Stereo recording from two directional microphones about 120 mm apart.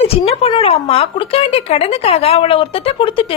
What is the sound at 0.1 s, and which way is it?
A woman's voice, 55° left (ahead or behind).